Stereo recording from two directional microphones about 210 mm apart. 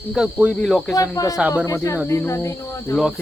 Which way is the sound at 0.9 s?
15° left (ahead or behind).